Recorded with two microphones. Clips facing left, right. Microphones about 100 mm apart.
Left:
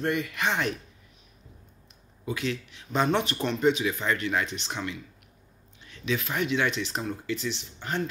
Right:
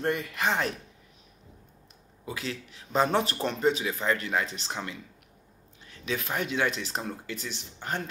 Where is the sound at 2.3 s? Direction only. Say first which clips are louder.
Left 5 dB; 35° right (ahead or behind).